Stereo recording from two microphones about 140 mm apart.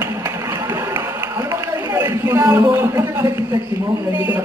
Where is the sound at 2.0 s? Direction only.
20° right (ahead or behind).